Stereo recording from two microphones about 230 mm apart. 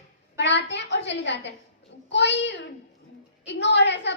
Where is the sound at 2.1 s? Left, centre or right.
Left.